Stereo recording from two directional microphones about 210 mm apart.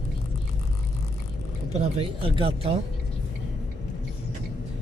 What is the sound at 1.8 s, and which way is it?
Speech, 25° right (ahead or behind).